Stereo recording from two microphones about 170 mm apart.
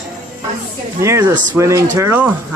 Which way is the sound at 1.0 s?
15° right (ahead or behind).